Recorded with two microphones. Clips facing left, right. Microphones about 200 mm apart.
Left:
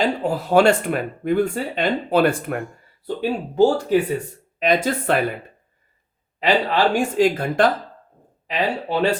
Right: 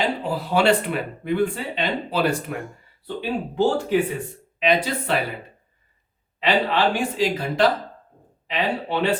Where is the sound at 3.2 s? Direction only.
40° left (ahead or behind).